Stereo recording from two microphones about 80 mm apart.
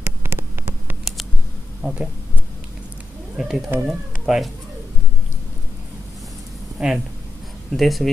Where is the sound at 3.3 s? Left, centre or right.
Centre.